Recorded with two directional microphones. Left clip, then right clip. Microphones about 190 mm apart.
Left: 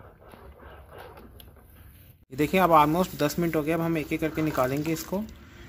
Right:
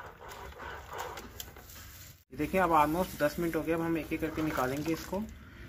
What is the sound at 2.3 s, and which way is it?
Speech, 70° left (ahead or behind).